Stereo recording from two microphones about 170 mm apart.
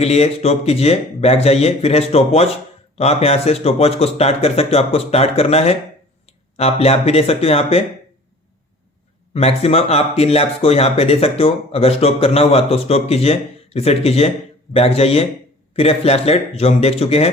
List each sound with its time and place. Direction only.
0.0 s speech: 40° left (ahead or behind)
9.3 s speech: 35° left (ahead or behind)